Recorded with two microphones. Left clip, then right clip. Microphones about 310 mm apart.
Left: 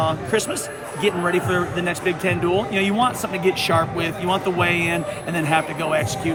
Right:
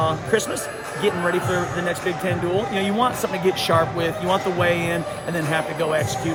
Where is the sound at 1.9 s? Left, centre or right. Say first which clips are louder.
Left 2 dB; centre.